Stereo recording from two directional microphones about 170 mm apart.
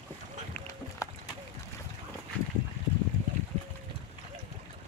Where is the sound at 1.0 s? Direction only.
20° left (ahead or behind).